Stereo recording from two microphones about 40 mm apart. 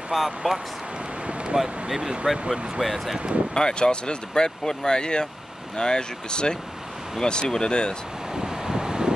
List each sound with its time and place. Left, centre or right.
0.1 s speech: centre
1.2 s a sound: right
1.6 s speech: centre
2.8 s speech: centre
3.5 s speech: left
8.4 s vehicle: centre